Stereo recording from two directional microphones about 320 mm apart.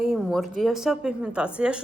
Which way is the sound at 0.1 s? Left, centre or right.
Centre.